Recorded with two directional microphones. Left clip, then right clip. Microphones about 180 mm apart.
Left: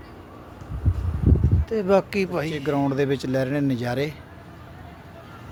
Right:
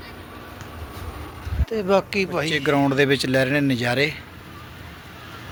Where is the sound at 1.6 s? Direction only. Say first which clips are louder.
Even; 45° left (ahead or behind).